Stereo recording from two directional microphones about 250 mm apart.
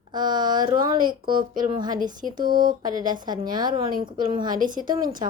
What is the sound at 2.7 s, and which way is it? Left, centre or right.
A woman's voice, centre.